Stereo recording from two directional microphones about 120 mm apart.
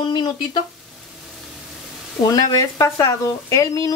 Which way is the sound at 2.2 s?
30° left (ahead or behind).